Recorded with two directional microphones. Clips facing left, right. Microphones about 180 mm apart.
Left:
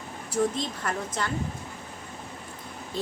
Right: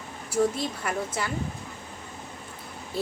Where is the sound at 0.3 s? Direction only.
10° right (ahead or behind).